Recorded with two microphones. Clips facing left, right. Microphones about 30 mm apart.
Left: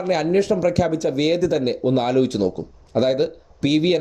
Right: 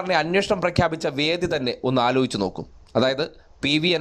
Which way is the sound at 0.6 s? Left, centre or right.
Right.